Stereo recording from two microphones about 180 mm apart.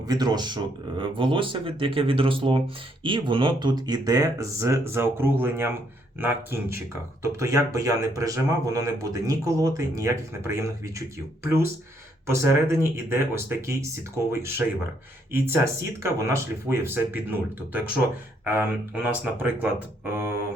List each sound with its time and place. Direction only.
0.1 s speech: 25° right (ahead or behind)
15.3 s speech: 15° right (ahead or behind)